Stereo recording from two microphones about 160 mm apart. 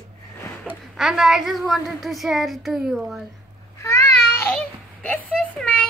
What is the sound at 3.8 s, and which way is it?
Cat, 15° left (ahead or behind).